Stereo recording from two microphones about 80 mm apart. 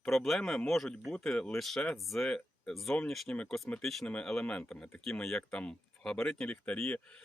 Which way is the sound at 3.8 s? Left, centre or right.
Centre.